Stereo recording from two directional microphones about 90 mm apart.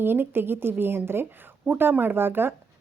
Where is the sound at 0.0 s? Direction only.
25° right (ahead or behind).